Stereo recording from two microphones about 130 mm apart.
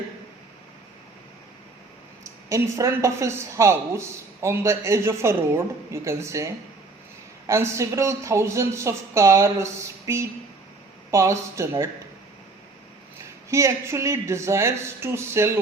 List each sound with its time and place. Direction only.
2.5 s speech: 25° right (ahead or behind)
13.5 s speech: 20° right (ahead or behind)